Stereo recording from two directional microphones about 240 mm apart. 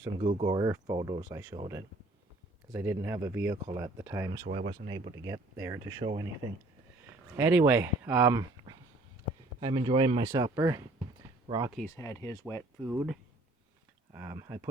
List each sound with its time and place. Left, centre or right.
0.0 s speech: right
4.4 s speech: right
7.3 s speech: centre
11.9 s speech: centre
12.8 s speech: centre